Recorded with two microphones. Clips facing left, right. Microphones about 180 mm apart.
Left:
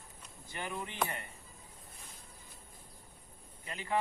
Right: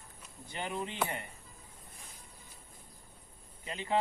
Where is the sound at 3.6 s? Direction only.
20° right (ahead or behind).